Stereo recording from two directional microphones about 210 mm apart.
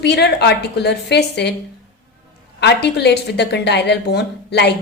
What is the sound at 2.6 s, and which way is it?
A woman's voice, 55° left (ahead or behind).